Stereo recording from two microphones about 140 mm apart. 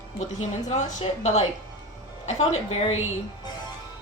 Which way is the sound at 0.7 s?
55° left (ahead or behind).